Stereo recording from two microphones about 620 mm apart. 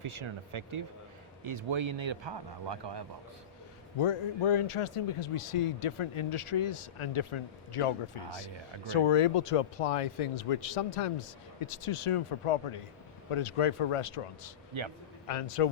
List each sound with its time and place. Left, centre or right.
0.0 s speech: right
3.9 s a man's voice: left
14.7 s speech: right
15.3 s speech: left